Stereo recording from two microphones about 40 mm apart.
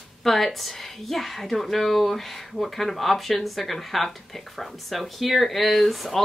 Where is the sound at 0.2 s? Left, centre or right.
Centre.